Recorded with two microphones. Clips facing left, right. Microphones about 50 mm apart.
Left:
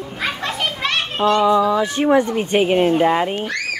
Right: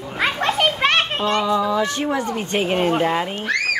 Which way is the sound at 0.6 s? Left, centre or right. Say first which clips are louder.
Right 5 dB; right.